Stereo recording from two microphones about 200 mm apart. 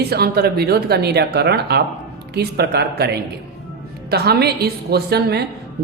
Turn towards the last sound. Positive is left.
turn(degrees=-55)  # may be behind; listen again after turning